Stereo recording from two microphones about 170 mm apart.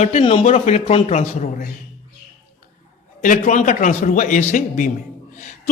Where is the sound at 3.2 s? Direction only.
50° left (ahead or behind).